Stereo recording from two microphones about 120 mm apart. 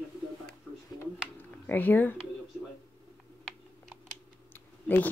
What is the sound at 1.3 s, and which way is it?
Speech, 15° left (ahead or behind).